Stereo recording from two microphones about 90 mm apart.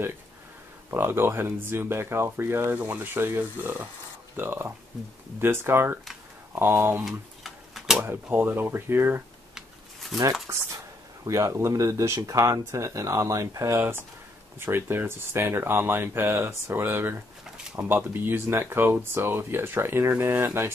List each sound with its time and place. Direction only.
0.8 s speech: 25° right (ahead or behind)
7.1 s tick-tock: centre (ahead or behind)
8.0 s speech: 25° right (ahead or behind)
10.5 s speech: 30° right (ahead or behind)